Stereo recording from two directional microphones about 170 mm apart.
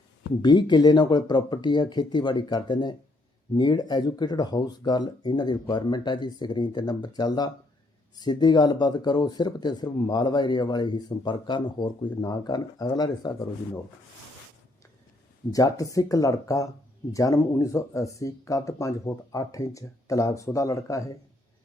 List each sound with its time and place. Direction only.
0.4 s speech: 25° left (ahead or behind)
15.5 s speech: 20° left (ahead or behind)